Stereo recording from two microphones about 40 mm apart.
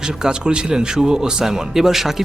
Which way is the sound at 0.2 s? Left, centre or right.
Right.